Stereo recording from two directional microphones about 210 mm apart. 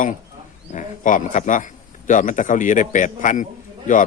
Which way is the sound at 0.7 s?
35° left (ahead or behind).